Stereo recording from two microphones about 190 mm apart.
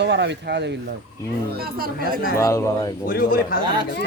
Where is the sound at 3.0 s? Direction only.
50° left (ahead or behind).